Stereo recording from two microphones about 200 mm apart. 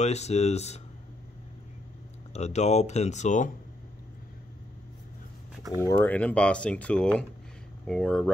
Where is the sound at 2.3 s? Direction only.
35° left (ahead or behind).